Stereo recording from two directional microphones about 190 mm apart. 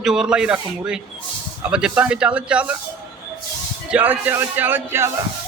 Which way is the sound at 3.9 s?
10° right (ahead or behind).